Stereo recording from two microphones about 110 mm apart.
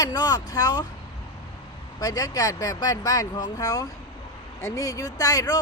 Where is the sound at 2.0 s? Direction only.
35° left (ahead or behind).